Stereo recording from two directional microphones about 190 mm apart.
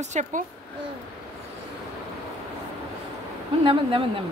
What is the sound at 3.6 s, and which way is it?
Speech, 25° right (ahead or behind).